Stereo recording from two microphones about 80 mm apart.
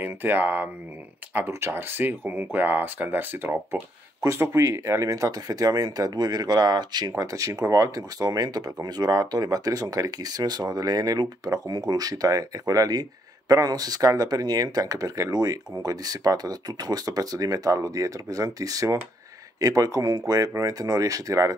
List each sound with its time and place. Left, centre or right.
0.0 s speech: right
7.2 s speech: right